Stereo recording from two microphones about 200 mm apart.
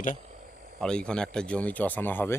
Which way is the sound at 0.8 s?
5° left (ahead or behind).